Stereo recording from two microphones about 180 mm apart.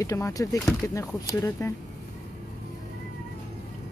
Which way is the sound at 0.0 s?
20° left (ahead or behind).